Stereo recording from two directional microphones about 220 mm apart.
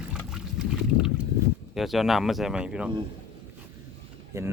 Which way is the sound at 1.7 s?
Centre (ahead or behind).